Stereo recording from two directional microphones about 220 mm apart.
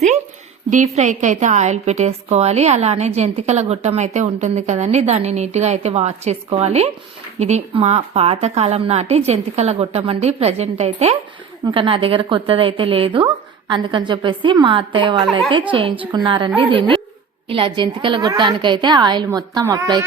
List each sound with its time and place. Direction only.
0.7 s a woman's voice: 35° right (ahead or behind); by 20.0 s 15° right (ahead or behind)